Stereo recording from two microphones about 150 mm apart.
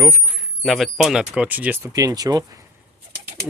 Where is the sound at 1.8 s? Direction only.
25° right (ahead or behind).